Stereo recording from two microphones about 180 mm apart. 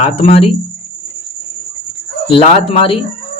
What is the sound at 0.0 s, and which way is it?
Speech, 35° left (ahead or behind).